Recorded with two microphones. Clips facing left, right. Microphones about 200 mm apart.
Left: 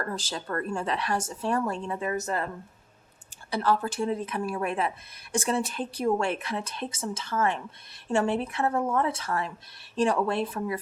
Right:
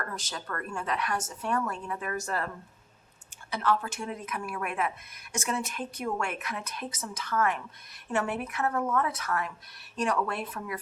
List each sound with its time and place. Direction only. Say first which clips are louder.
0.0 s speech: left 5 dB; 30° left (ahead or behind)
3.5 s a woman's voice: left 3 dB; 35° left (ahead or behind)